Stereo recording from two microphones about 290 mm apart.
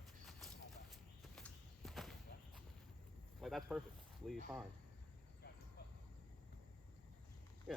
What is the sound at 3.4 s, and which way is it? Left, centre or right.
Speech, centre.